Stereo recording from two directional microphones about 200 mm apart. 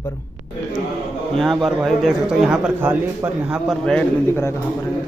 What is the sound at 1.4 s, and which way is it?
A man's voice, centre (ahead or behind).